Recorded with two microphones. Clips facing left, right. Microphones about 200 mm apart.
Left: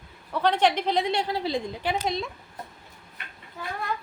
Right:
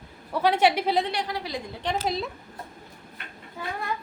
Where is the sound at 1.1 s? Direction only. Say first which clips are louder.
Left 4 dB; 25° left (ahead or behind).